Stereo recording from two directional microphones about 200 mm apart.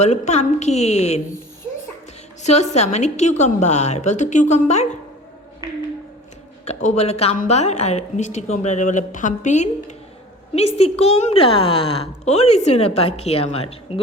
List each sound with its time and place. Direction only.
0.0 s a woman's voice: 35° left (ahead or behind)
2.4 s a woman's voice: 35° left (ahead or behind)
6.7 s a woman's voice: 35° left (ahead or behind)